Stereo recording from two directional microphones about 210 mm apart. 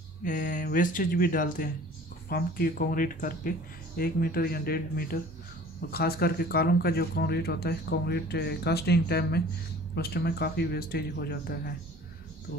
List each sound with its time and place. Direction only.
0.2 s speech: 40° left (ahead or behind)